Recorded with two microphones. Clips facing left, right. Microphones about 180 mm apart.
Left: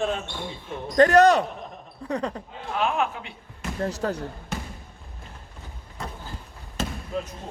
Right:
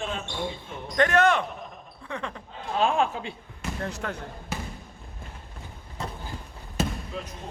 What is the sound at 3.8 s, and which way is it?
Speech, 35° left (ahead or behind).